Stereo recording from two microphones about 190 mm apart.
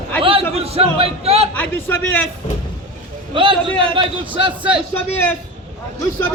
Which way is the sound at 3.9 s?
25° right (ahead or behind).